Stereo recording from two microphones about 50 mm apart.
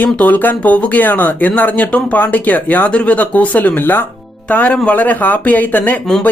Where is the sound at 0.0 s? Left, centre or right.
Left.